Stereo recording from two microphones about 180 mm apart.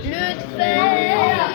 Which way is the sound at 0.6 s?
40° left (ahead or behind).